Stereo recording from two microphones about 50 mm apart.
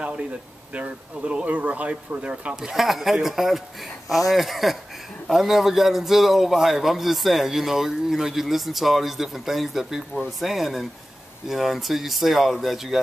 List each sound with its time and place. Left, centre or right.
0.7 s speech: right
2.5 s a man's voice: centre